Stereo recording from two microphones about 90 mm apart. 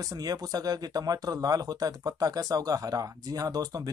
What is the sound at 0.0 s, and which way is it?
Speech, 40° right (ahead or behind).